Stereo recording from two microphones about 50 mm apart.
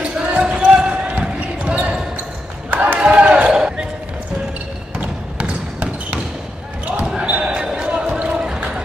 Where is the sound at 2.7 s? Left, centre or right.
Right.